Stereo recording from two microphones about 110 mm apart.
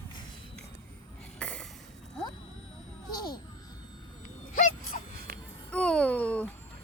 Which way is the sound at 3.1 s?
40° left (ahead or behind).